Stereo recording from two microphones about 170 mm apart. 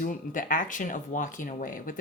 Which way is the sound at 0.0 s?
50° left (ahead or behind).